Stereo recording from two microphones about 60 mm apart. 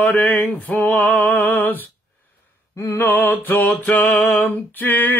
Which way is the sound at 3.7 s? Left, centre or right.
Left.